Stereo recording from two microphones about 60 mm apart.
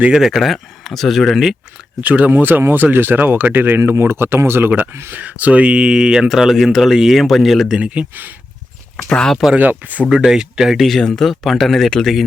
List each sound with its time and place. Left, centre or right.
0.1 s speech: centre
2.0 s speech: right
4.7 s speech: right
5.1 s speech: right; by 7.7 s centre
7.7 s speech: right
9.0 s speech: centre
9.6 s speech: right
10.1 s speech: centre